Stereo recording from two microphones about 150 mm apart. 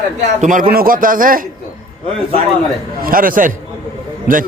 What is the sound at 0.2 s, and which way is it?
A man's voice, 60° right (ahead or behind).